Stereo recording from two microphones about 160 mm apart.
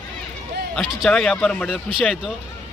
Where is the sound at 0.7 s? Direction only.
Centre (ahead or behind).